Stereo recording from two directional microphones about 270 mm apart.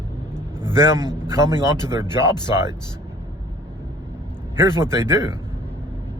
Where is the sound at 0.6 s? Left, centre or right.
Centre.